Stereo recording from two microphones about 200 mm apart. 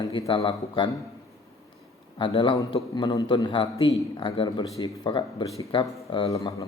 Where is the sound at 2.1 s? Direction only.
25° left (ahead or behind).